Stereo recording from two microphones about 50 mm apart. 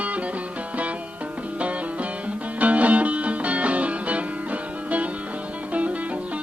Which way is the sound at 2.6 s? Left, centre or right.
Right.